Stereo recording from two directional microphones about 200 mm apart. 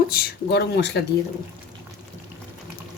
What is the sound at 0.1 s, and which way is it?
Speech, 50° left (ahead or behind).